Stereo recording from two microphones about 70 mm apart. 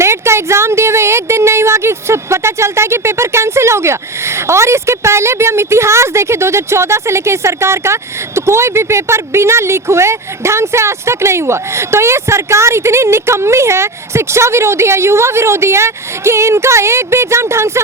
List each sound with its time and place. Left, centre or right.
0.0 s speech: right